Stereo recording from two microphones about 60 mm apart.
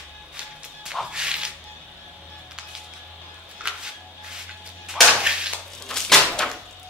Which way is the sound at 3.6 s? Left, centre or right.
Right.